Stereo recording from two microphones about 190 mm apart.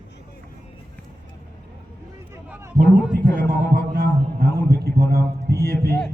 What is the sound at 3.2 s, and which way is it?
Heart sounds, 45° right (ahead or behind).